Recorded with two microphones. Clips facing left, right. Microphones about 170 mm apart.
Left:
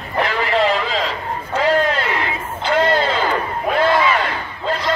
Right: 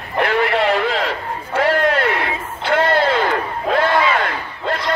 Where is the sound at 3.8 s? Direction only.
60° right (ahead or behind).